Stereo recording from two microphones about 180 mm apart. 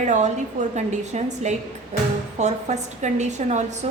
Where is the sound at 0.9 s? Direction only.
40° right (ahead or behind).